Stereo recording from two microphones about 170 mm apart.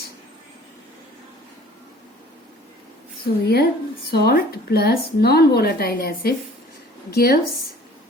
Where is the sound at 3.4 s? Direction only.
65° left (ahead or behind).